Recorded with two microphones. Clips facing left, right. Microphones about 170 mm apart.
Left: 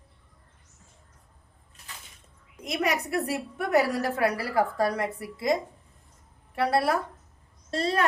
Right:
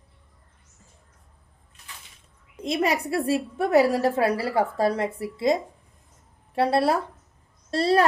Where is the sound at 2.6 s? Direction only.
30° right (ahead or behind).